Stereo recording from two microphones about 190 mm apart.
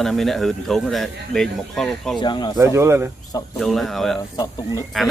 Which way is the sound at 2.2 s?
25° left (ahead or behind).